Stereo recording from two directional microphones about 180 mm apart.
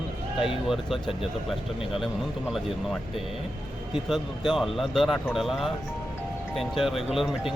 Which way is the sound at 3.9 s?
Centre (ahead or behind).